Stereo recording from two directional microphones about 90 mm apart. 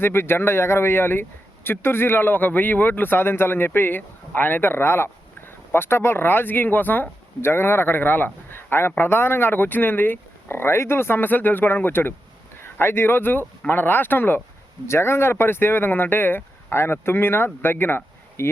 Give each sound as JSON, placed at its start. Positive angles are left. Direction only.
{"t": 0.0, "sound": "speech", "side_deg": 25}